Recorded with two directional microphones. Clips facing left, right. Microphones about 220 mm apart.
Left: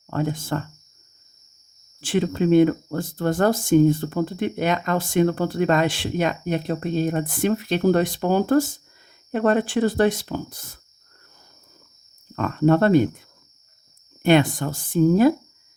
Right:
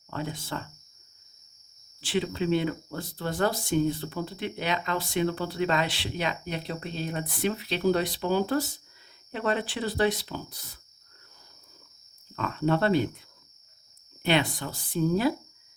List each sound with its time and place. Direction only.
0.1 s speech: 50° left (ahead or behind)
2.0 s speech: 50° left (ahead or behind)
12.4 s speech: 50° left (ahead or behind)